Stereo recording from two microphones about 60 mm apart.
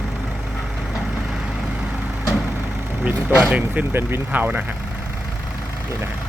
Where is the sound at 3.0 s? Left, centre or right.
Centre.